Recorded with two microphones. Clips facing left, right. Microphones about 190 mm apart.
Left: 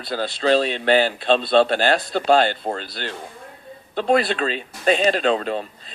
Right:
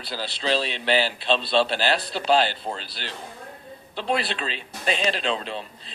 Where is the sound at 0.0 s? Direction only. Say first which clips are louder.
Left 7 dB; 50° left (ahead or behind).